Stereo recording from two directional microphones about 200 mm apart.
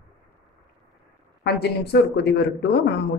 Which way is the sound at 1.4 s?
55° left (ahead or behind).